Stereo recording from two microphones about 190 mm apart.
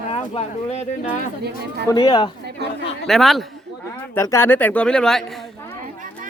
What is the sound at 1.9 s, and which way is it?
Speech, 20° left (ahead or behind).